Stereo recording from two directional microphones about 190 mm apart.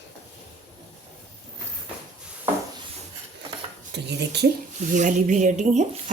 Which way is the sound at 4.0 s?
60° right (ahead or behind).